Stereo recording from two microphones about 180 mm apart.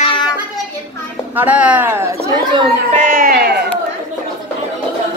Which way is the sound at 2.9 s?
50° right (ahead or behind).